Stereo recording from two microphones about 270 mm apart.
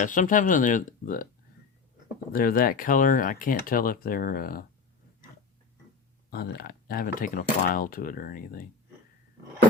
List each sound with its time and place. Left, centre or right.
0.0 s speech: left
2.3 s speech: left
6.3 s speech: left